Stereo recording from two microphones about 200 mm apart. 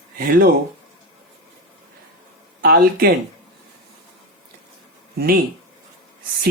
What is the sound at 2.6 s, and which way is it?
Speech, 50° right (ahead or behind).